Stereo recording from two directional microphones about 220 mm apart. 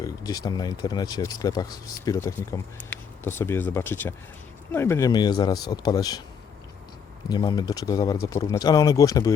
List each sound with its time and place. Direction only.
0.0 s speech: 15° left (ahead or behind)
7.3 s speech: 20° left (ahead or behind)